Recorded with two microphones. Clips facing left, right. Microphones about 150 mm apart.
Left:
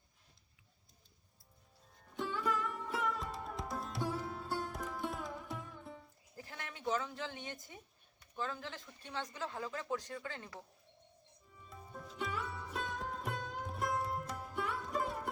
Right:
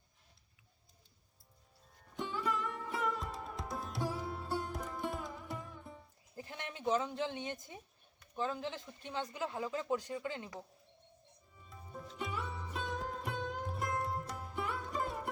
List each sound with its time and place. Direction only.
2.0 s music: centre (ahead or behind)
6.3 s speech: 20° right (ahead or behind)
11.7 s music: centre (ahead or behind)